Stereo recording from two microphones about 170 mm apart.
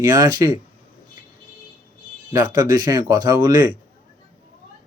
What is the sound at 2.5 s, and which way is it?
Speech, 25° right (ahead or behind).